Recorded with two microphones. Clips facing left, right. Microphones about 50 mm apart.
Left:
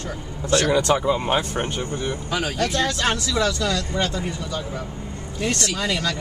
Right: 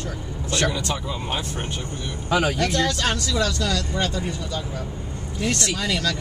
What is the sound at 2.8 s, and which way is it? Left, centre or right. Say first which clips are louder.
Speech: left 1 dB; left.